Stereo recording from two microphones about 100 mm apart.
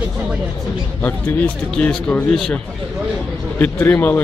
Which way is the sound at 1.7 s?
10° left (ahead or behind).